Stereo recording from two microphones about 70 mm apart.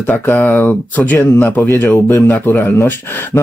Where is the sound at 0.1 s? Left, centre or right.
Left.